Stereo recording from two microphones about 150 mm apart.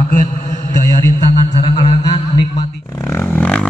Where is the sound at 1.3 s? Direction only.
35° left (ahead or behind).